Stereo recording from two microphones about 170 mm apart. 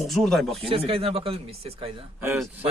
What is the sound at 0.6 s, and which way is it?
Speech, 35° right (ahead or behind).